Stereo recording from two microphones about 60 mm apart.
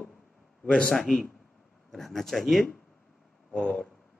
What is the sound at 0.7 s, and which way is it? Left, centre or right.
Speech, centre.